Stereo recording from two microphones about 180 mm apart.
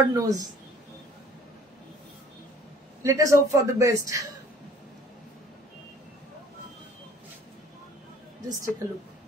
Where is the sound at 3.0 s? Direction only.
15° right (ahead or behind).